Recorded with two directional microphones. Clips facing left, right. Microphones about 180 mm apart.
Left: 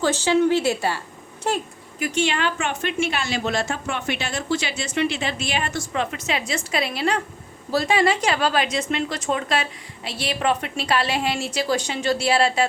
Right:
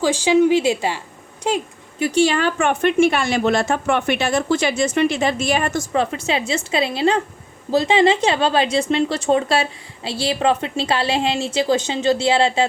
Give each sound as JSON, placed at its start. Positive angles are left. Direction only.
{"t": 0.0, "sound": "a woman's voice", "side_deg": -10}
{"t": 2.0, "sound": "a woman's voice", "side_deg": -35}